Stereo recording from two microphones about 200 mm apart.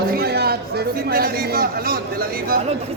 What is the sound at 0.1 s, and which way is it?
Speech, 50° right (ahead or behind).